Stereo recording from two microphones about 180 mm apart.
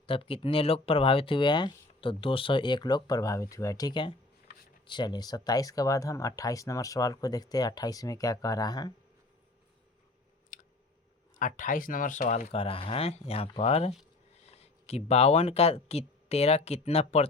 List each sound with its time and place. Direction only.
0.0 s speech: 30° left (ahead or behind)
10.5 s a sound: 45° left (ahead or behind)
11.3 s speech: 45° left (ahead or behind)